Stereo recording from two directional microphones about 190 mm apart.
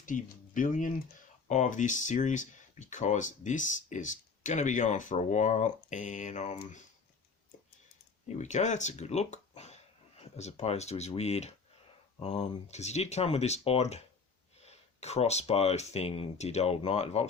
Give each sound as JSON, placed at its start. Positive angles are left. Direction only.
{"t": 0.0, "sound": "speech", "side_deg": 45}
{"t": 8.4, "sound": "speech", "side_deg": 40}